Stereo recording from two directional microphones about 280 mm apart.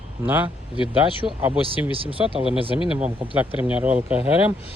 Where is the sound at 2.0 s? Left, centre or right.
Centre.